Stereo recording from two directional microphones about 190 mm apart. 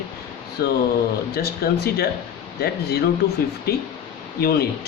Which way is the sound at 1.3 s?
55° left (ahead or behind).